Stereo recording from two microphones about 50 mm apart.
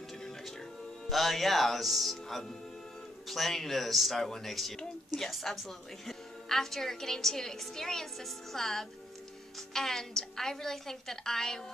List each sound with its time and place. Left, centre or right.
1.0 s a woman's voice: centre